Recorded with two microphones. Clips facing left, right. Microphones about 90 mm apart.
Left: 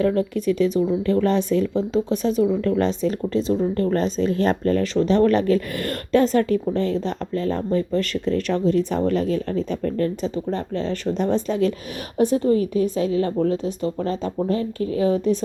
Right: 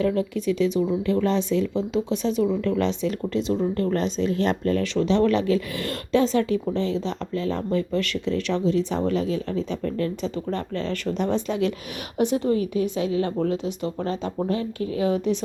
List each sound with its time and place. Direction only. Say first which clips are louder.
0.0 s a woman's voice: left 3 dB; 45° left (ahead or behind)
10.5 s a woman's voice: left 2 dB; 35° left (ahead or behind)